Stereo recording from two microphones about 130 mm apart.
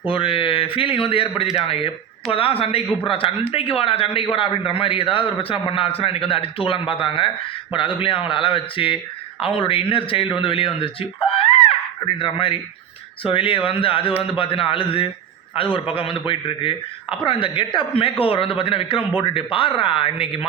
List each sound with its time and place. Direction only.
0.0 s a man's voice: 40° left (ahead or behind)